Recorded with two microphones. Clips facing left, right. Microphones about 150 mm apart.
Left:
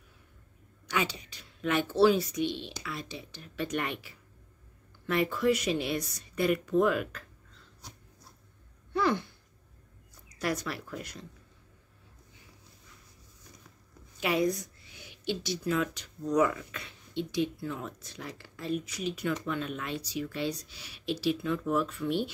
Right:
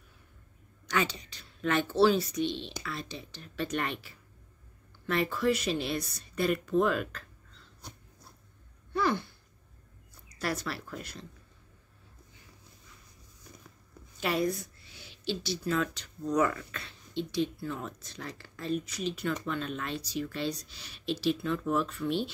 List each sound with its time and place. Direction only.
0.8 s speech: 10° left (ahead or behind)
8.9 s a sound: 20° left (ahead or behind)
10.4 s speech: 15° left (ahead or behind)
14.2 s speech: 15° left (ahead or behind)